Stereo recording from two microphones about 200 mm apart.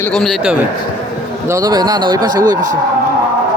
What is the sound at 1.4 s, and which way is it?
Speech, 15° right (ahead or behind).